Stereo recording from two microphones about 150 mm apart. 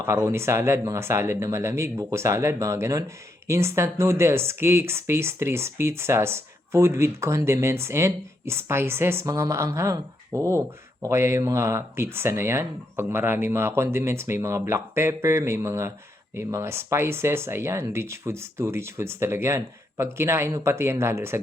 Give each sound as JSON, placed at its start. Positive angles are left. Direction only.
{"t": 0.0, "sound": "speech", "side_deg": -20}